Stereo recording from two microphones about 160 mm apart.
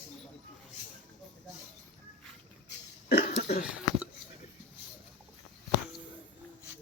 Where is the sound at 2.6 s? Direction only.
90° left.